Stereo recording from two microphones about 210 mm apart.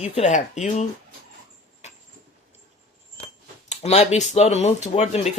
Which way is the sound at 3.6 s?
30° left (ahead or behind).